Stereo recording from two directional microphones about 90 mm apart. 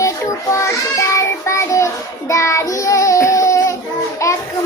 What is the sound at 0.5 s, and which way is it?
Child singing, 35° left (ahead or behind).